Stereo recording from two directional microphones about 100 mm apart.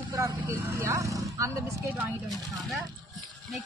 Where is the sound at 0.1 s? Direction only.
30° right (ahead or behind).